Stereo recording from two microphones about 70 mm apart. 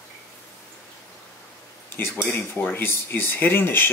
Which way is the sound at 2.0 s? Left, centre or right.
Left.